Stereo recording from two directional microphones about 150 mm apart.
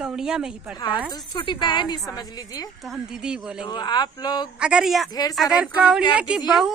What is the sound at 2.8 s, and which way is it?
Speech, 5° right (ahead or behind).